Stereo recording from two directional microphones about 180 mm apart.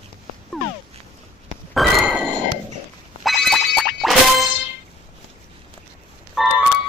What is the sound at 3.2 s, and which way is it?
Music, centre (ahead or behind).